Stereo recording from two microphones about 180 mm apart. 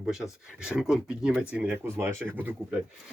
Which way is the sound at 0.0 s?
5° right (ahead or behind).